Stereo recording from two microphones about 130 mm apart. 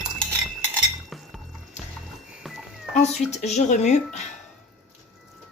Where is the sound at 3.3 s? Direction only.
60° left (ahead or behind).